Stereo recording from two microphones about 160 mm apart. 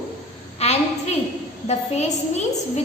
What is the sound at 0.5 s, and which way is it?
A woman's voice, 40° left (ahead or behind).